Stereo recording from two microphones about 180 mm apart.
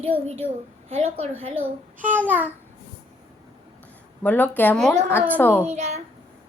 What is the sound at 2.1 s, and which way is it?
Babbling, 10° right (ahead or behind).